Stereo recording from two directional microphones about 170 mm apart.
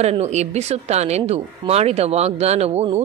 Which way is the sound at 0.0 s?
40° right (ahead or behind).